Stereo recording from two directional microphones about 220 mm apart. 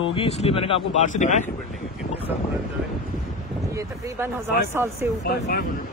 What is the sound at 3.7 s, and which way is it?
Speech, 15° right (ahead or behind).